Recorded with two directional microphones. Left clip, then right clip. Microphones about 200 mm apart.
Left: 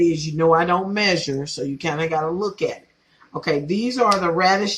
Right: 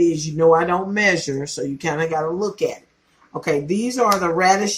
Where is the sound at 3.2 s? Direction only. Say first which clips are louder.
Right 1 dB; 5° left (ahead or behind).